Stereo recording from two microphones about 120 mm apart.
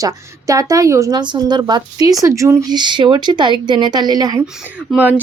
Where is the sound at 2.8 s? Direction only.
40° right (ahead or behind).